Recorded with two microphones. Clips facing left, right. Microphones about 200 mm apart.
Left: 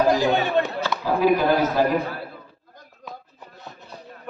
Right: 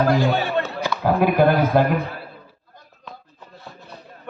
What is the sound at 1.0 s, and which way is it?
Speech, 55° right (ahead or behind).